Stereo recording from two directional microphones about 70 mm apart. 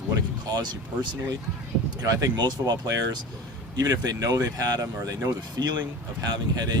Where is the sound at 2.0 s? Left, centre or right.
Right.